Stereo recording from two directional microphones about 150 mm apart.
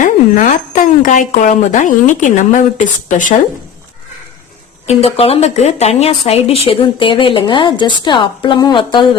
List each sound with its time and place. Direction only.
0.0 s speech: 60° left (ahead or behind)
4.9 s a woman's voice: 40° left (ahead or behind)